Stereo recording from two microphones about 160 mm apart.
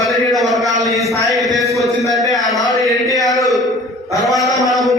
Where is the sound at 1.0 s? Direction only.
Centre (ahead or behind).